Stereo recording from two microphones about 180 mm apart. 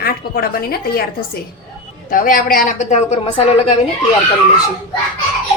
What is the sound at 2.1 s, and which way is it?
A woman's voice, 50° left (ahead or behind).